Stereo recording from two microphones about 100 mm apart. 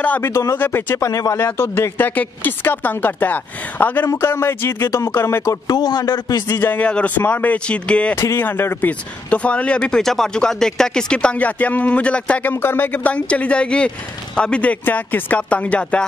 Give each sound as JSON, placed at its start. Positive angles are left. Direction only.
{"t": 0.0, "sound": "speech", "side_deg": 15}
{"t": 0.3, "sound": "speech", "side_deg": 30}
{"t": 5.7, "sound": "a man's voice", "side_deg": 40}
{"t": 6.5, "sound": "speech", "side_deg": 20}
{"t": 8.2, "sound": "speech", "side_deg": 20}